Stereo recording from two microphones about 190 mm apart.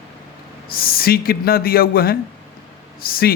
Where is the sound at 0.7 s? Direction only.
50° left (ahead or behind).